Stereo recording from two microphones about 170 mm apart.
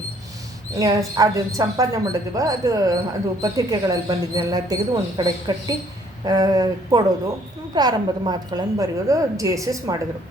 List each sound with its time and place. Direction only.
0.8 s speech: 20° right (ahead or behind)